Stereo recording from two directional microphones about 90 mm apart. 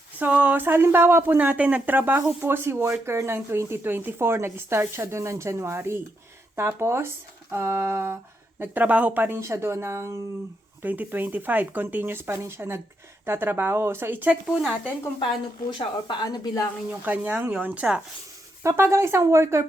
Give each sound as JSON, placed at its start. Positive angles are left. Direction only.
{"t": 0.2, "sound": "speech", "side_deg": -15}
{"t": 10.8, "sound": "speech", "side_deg": -20}
{"t": 14.4, "sound": "speech", "side_deg": -5}
{"t": 15.7, "sound": "speech", "side_deg": 60}
{"t": 16.9, "sound": "speech", "side_deg": -20}
{"t": 18.6, "sound": "speech", "side_deg": -30}